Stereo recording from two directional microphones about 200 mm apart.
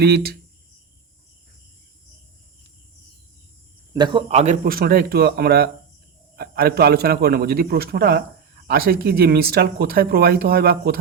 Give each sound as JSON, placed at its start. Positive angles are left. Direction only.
{"t": 0.0, "sound": "speech", "side_deg": -50}
{"t": 3.9, "sound": "speech", "side_deg": -25}
{"t": 4.6, "sound": "speech", "side_deg": -45}